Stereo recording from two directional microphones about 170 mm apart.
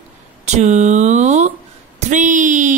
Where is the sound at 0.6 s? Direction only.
45° right (ahead or behind).